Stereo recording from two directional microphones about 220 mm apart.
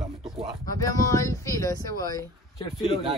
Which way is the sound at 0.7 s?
15° left (ahead or behind).